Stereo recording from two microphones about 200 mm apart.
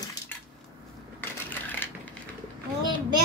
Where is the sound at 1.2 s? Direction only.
10° left (ahead or behind).